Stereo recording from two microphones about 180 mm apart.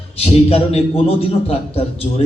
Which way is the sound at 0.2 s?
35° left (ahead or behind).